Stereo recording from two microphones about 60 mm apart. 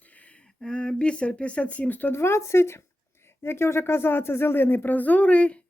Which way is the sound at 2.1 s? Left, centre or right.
Left.